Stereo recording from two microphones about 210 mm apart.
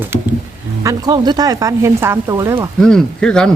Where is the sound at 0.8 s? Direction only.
20° right (ahead or behind).